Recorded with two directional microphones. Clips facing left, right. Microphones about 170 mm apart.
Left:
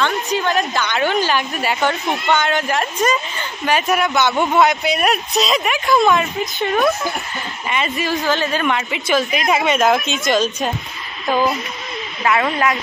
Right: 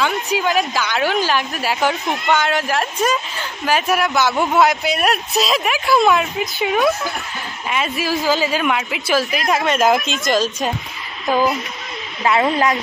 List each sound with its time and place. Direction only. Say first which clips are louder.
0.0 s a woman's voice: even; 5° right (ahead or behind)
12.2 s speech: right 2 dB; 25° right (ahead or behind)